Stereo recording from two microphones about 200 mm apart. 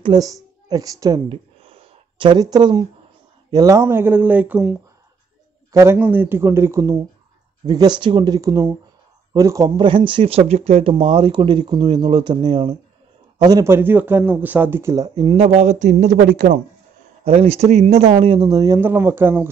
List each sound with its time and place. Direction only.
0.0 s a woman's voice: 20° right (ahead or behind)